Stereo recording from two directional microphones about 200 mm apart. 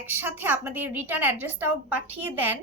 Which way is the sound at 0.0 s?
10° right (ahead or behind).